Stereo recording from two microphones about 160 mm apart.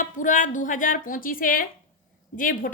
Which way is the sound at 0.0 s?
55° left (ahead or behind).